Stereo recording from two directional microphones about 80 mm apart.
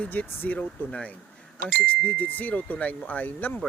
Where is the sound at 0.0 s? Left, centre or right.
Centre.